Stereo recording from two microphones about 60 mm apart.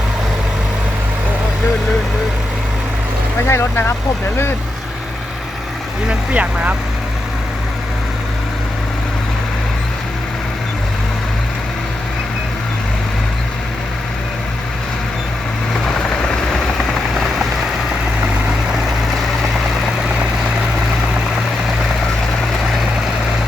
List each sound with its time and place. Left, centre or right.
3.4 s speech: left
6.1 s speech: right